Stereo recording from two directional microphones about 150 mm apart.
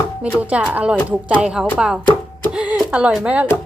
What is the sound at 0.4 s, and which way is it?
Speech, 10° right (ahead or behind).